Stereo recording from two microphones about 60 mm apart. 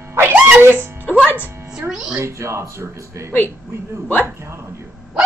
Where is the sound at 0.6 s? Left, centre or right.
Right.